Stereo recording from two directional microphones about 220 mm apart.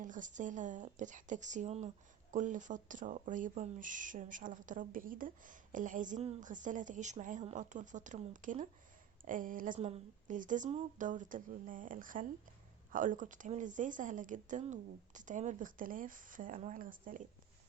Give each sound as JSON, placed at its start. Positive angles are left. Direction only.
{"t": 0.0, "sound": "speech", "side_deg": -35}